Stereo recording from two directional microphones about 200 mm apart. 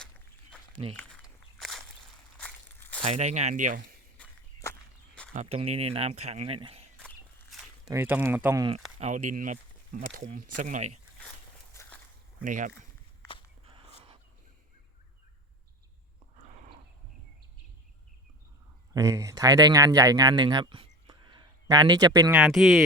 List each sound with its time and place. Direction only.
1.5 s walk: centre (ahead or behind)
2.4 s a sound: 5° left (ahead or behind)
3.0 s speech: 35° right (ahead or behind)
4.2 s walk: 10° left (ahead or behind)
5.3 s speech: 35° right (ahead or behind)
7.5 s a sound: centre (ahead or behind)
7.9 s speech: 10° right (ahead or behind)
9.0 s speech: 35° right (ahead or behind)
11.7 s walk: 15° left (ahead or behind)
12.4 s speech: 40° right (ahead or behind)
13.7 s a sound: 30° right (ahead or behind)
18.9 s speech: 15° right (ahead or behind)
22.4 s speech: centre (ahead or behind)